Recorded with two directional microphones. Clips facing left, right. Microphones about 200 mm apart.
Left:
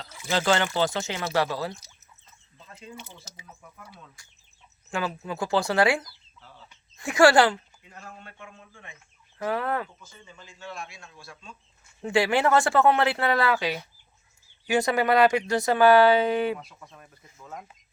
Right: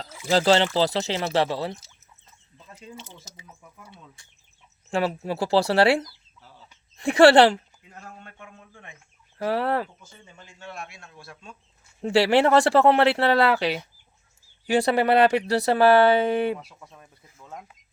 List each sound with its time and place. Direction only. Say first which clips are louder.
0.0 s speech: right 5 dB; 35° right (ahead or behind)
2.9 s speech: right 1 dB; 20° right (ahead or behind)
4.9 s speech: right 5 dB; 30° right (ahead or behind)
6.7 s a sound: right 8 dB; 35° right (ahead or behind)
8.2 s a man's voice: even; 45° right (ahead or behind)
9.4 s speech: right 3 dB; 30° right (ahead or behind)
10.2 s speech: left 1 dB; 60° right (ahead or behind)
12.0 s speech: right 4 dB; 35° right (ahead or behind)
16.6 s speech: right 1 dB; 5° right (ahead or behind)